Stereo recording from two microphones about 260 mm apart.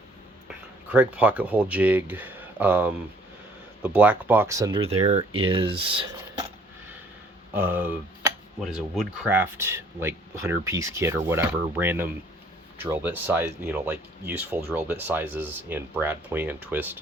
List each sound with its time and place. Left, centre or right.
0.4 s speech: centre
7.5 s speech: centre